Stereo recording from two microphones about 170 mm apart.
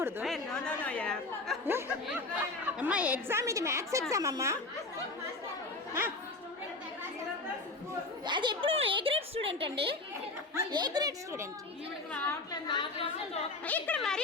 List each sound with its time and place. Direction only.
0.3 s a woman's voice: 5° left (ahead or behind)
1.6 s a woman's voice: 10° right (ahead or behind)
8.2 s a woman's voice: 25° right (ahead or behind)
12.6 s a woman's voice: 30° left (ahead or behind)
13.7 s a woman's voice: 10° left (ahead or behind)